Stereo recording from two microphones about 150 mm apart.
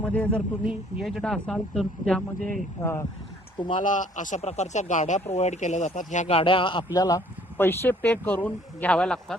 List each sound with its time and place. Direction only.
0.0 s speech: 10° left (ahead or behind)
0.6 s speech: 5° right (ahead or behind)
2.8 s speech: 15° left (ahead or behind)
3.8 s a man's voice: 60° left (ahead or behind); by 6.8 s 35° left (ahead or behind)
6.9 s speech: 25° left (ahead or behind); by 9.2 s 5° left (ahead or behind)